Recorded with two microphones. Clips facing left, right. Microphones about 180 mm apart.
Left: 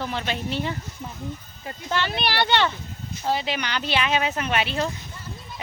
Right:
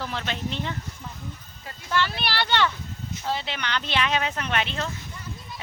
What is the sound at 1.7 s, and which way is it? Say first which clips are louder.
Speech: even; 20° left (ahead or behind).